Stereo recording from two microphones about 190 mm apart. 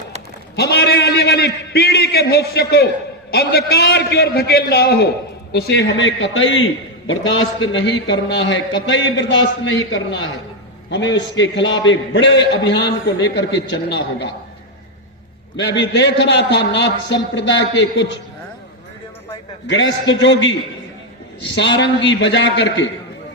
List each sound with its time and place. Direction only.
0.5 s a man's voice: 60° left (ahead or behind); by 6.6 s 80° left
7.1 s a man's voice: 90° left; by 8.5 s 70° left (ahead or behind)
9.6 s a man's voice: 80° left
10.8 s a man's voice: 70° left (ahead or behind)
15.5 s a man's voice: 65° left (ahead or behind)
19.6 s a man's voice: 75° left (ahead or behind)